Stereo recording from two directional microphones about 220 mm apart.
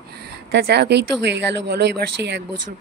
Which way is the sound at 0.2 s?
50° right (ahead or behind).